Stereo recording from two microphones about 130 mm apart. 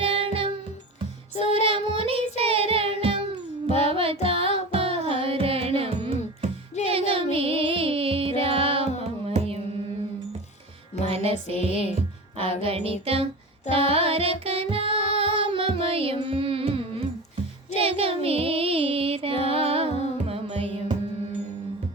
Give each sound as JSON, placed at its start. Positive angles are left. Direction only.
{"t": 0.0, "sound": "music", "side_deg": -45}
{"t": 1.5, "sound": "music", "side_deg": -45}
{"t": 11.1, "sound": "music", "side_deg": -50}